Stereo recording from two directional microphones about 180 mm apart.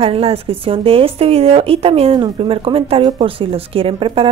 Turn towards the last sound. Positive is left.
turn(degrees=-30)  # may be behind; listen again after turning